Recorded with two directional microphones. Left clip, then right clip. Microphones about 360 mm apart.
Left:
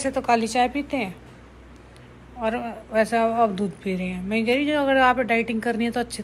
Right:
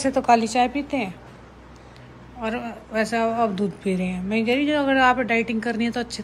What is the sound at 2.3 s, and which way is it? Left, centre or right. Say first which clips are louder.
Speech: left 2 dB; centre.